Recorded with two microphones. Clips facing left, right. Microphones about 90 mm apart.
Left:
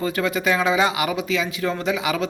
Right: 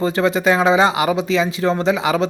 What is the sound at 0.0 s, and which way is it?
Speech, 30° right (ahead or behind).